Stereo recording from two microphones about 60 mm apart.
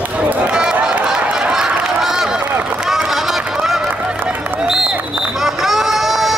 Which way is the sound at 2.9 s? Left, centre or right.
Centre.